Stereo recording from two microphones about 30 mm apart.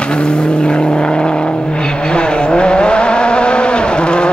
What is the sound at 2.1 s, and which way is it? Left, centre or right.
Vehicle, left.